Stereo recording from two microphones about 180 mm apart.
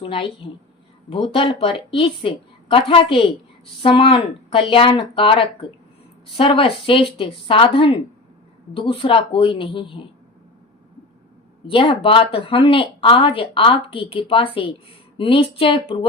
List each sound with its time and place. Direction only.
0.0 s speech: 30° left (ahead or behind)
11.6 s speech: 30° left (ahead or behind)